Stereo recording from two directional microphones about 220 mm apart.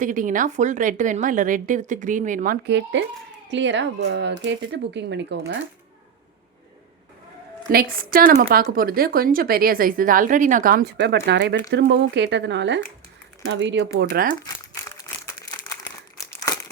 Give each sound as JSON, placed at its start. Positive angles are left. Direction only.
{"t": 0.0, "sound": "a woman's voice", "side_deg": -35}
{"t": 3.0, "sound": "a child's voice", "side_deg": -55}
{"t": 7.7, "sound": "a woman's voice", "side_deg": -40}
{"t": 14.4, "sound": "crumpling", "side_deg": 15}
{"t": 16.2, "sound": "crumpling", "side_deg": 15}